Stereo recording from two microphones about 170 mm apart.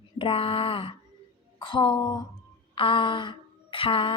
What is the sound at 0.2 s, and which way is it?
A woman's voice, 35° left (ahead or behind).